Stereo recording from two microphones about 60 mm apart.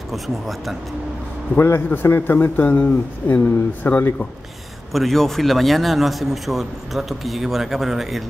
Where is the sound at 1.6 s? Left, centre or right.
Left.